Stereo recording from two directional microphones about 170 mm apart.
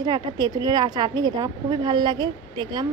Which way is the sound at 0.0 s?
25° right (ahead or behind).